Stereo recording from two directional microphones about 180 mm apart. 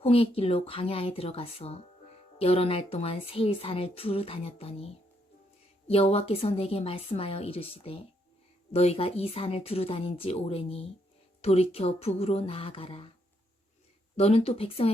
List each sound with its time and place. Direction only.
0.0 s speech: 30° left (ahead or behind)
14.2 s speech: 35° left (ahead or behind)